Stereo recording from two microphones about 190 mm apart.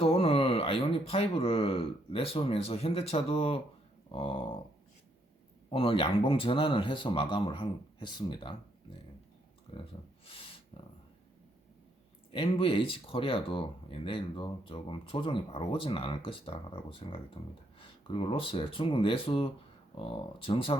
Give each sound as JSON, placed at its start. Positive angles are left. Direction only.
{"t": 0.0, "sound": "speech", "side_deg": 30}
{"t": 5.7, "sound": "speech", "side_deg": 30}
{"t": 9.7, "sound": "speech", "side_deg": 30}
{"t": 10.2, "sound": "a sound", "side_deg": 30}
{"t": 12.3, "sound": "speech", "side_deg": 30}